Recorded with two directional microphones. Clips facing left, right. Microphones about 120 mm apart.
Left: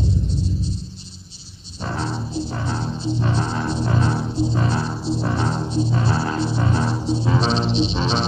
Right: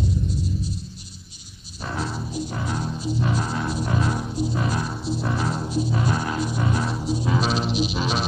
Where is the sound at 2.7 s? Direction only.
30° left (ahead or behind).